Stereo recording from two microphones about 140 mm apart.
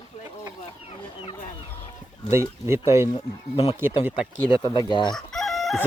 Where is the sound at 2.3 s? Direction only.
20° right (ahead or behind).